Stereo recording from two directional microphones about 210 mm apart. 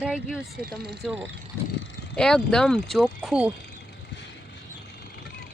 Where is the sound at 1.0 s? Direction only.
Centre (ahead or behind).